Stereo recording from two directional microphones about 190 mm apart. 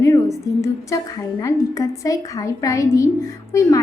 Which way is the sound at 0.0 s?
15° left (ahead or behind).